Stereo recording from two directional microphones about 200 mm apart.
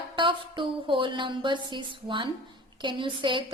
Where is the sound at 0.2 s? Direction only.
25° right (ahead or behind).